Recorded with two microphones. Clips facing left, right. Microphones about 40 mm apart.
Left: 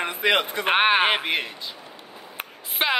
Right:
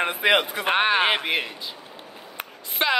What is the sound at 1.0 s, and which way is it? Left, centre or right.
Speech, centre.